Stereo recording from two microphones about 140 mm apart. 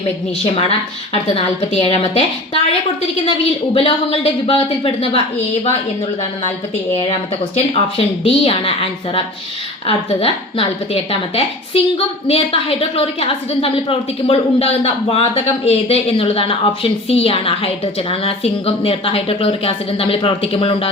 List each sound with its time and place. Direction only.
0.4 s speech: 40° left (ahead or behind)
3.8 s a woman's voice: 40° left (ahead or behind)
6.9 s a woman's voice: 45° left (ahead or behind)